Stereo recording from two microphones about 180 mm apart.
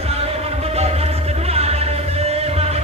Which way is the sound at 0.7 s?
35° right (ahead or behind).